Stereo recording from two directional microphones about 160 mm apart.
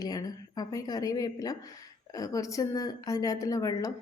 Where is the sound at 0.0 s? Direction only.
25° left (ahead or behind).